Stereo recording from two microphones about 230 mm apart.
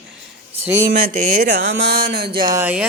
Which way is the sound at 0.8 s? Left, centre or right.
Right.